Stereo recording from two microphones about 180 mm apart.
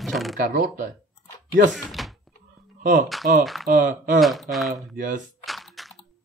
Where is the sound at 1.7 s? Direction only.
Centre (ahead or behind).